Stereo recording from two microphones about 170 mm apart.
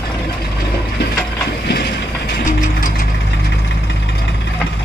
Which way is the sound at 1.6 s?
70° left (ahead or behind).